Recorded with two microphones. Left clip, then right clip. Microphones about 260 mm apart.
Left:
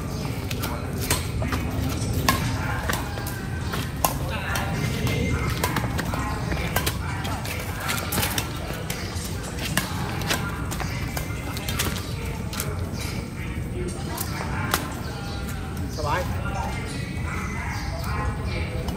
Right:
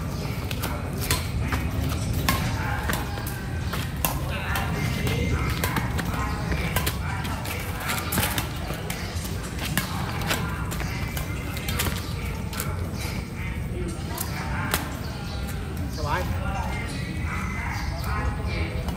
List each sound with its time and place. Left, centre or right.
2.3 s music: centre
5.6 s clip-clop: centre